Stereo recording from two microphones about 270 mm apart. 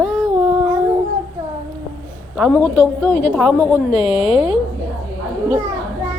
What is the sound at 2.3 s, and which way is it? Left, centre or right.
Speech, centre.